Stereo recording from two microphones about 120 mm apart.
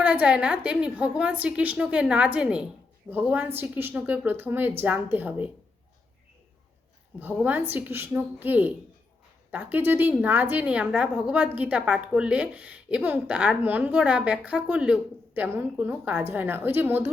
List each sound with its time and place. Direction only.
0.0 s a woman's voice: 10° right (ahead or behind)
7.4 s a woman's voice: 15° right (ahead or behind)